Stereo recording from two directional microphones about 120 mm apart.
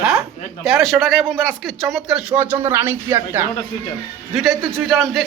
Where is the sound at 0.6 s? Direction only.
Centre (ahead or behind); by 3.4 s 20° right (ahead or behind).